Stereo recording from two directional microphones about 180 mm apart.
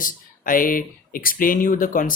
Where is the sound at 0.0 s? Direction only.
50° left (ahead or behind).